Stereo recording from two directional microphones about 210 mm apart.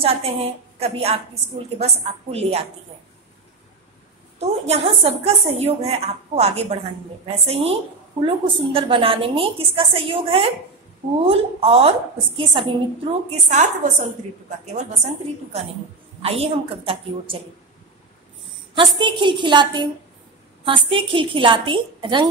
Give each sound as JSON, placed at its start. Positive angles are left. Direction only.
{"t": 0.0, "sound": "a woman's voice", "side_deg": -25}
{"t": 4.4, "sound": "a woman's voice", "side_deg": -30}
{"t": 18.8, "sound": "a woman's voice", "side_deg": -25}